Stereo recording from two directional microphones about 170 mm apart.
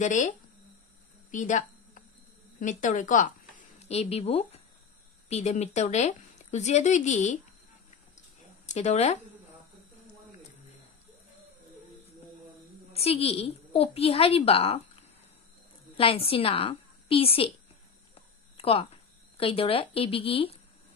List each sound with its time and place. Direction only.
0.0 s speech: 45° left (ahead or behind)
1.3 s a sound: 50° left (ahead or behind)
2.6 s speech: 50° left (ahead or behind)
8.7 s speech: 40° left (ahead or behind)
12.9 s speech: 35° left (ahead or behind)
16.0 s a woman's voice: 35° left (ahead or behind)
18.6 s speech: 35° left (ahead or behind)